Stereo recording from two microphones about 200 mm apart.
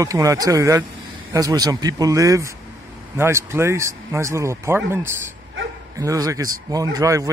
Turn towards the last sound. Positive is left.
turn(degrees=-15)  # may be behind; listen again after turning